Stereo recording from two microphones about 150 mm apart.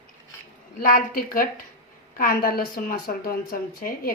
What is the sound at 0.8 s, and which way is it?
A woman's voice, 70° left (ahead or behind).